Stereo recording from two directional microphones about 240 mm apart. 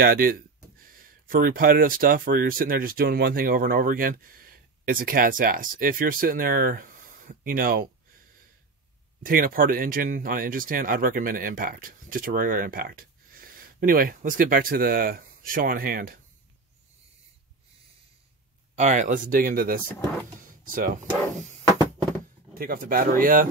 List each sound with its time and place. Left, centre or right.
0.0 s speech: right
9.2 s speech: right
18.8 s speech: right
22.5 s speech: right